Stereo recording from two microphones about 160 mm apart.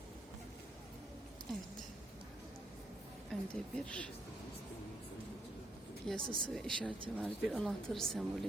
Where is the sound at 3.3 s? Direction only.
5° left (ahead or behind).